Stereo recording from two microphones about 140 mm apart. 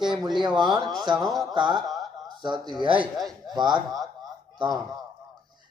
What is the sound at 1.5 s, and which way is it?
A man's voice, 30° right (ahead or behind).